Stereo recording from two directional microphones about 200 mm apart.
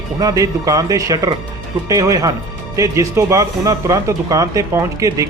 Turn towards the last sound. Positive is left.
turn(degrees=-15)  # may be behind; listen again after turning